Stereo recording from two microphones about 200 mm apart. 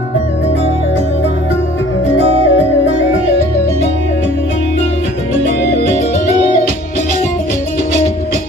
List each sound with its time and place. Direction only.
2.1 s music: 30° right (ahead or behind)
5.8 s music: 35° right (ahead or behind)